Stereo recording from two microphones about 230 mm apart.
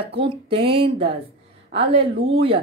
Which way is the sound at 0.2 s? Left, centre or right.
Right.